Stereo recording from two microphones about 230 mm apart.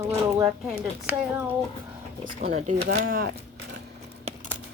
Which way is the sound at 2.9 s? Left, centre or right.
Right.